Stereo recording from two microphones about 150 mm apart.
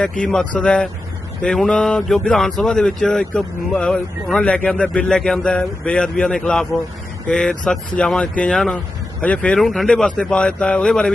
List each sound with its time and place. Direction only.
0.2 s speech: 5° left (ahead or behind)